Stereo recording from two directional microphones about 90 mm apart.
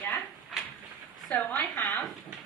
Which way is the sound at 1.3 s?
15° left (ahead or behind).